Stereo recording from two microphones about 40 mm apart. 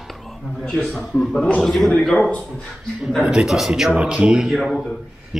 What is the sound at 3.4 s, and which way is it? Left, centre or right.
Speech, centre.